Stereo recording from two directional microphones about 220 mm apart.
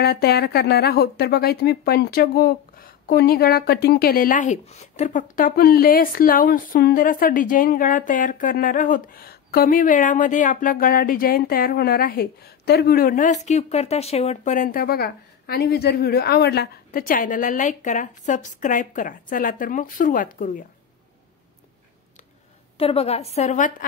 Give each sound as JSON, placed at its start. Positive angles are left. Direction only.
{"t": 0.0, "sound": "speech", "side_deg": 45}
{"t": 22.8, "sound": "a woman's voice", "side_deg": 25}